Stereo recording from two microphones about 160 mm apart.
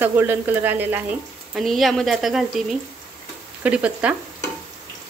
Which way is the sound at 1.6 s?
Centre (ahead or behind).